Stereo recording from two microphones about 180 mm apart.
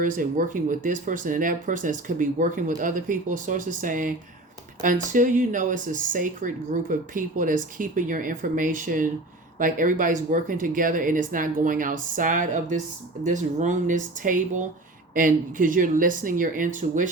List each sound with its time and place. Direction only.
0.0 s speech: 50° right (ahead or behind)